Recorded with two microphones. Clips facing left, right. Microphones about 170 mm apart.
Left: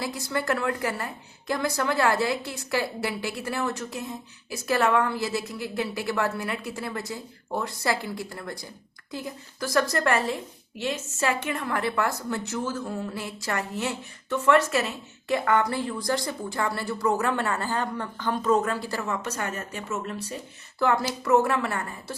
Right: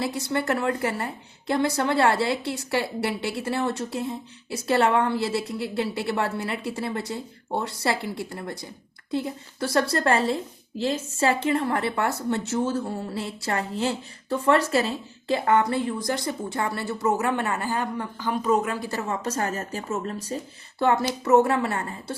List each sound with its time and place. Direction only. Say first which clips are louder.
0.0 s a woman's voice: right 3 dB; 25° right (ahead or behind)